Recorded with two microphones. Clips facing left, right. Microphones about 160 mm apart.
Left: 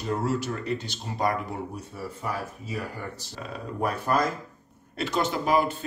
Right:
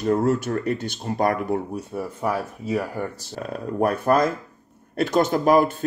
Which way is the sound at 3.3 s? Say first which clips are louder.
Right 7 dB; 50° right (ahead or behind).